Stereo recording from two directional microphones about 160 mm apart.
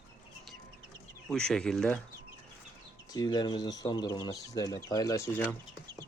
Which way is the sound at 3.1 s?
25° left (ahead or behind).